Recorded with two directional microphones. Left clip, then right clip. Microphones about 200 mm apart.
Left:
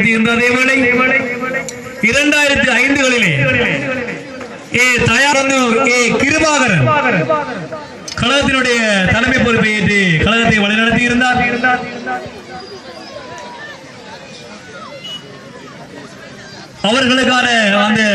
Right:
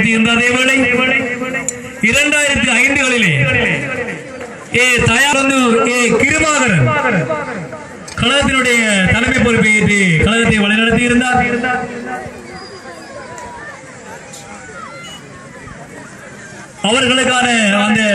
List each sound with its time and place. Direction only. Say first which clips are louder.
0.0 s a man's voice: even; 40° left (ahead or behind)
16.8 s a man's voice: even; 45° left (ahead or behind)